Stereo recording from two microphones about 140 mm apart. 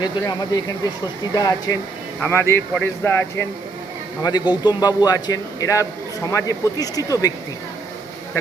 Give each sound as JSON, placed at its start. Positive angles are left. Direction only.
{"t": 0.0, "sound": "a man's voice", "side_deg": 30}
{"t": 4.2, "sound": "a man's voice", "side_deg": 30}